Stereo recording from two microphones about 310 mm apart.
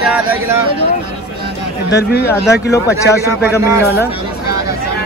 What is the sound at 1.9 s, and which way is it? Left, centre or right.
Speech, left.